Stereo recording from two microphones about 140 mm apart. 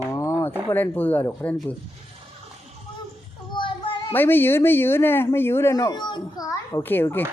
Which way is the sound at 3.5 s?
35° left (ahead or behind).